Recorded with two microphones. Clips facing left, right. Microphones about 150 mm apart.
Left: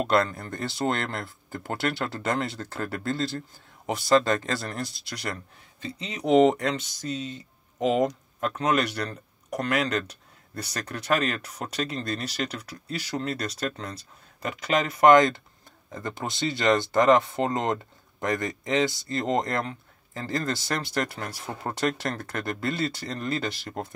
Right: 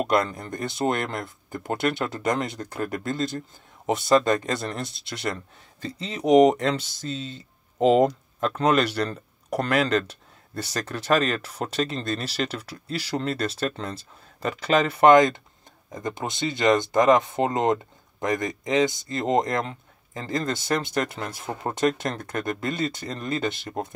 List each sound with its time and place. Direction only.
0.0 s speech: 15° right (ahead or behind)
5.8 s speech: 40° right (ahead or behind)
6.2 s speech: 15° right (ahead or behind)
6.6 s speech: 30° right (ahead or behind)
15.0 s speech: 20° right (ahead or behind)